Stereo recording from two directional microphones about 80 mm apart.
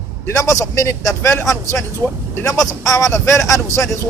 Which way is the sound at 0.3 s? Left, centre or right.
Left.